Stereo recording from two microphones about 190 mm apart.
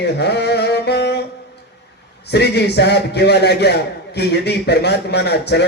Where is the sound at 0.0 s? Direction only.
60° left (ahead or behind).